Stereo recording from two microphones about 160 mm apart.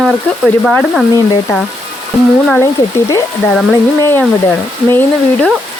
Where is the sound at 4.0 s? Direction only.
15° left (ahead or behind).